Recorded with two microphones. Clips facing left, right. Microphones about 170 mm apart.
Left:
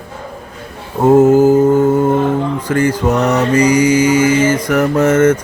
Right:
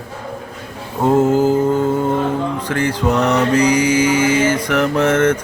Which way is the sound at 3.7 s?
50° left (ahead or behind).